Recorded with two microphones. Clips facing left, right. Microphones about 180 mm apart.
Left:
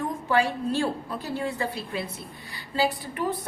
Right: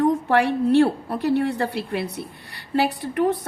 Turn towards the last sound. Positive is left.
turn(degrees=-65)  # may be behind; listen again after turning